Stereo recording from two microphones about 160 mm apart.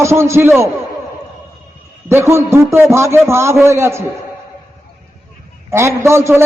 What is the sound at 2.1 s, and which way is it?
A man's voice, 15° right (ahead or behind).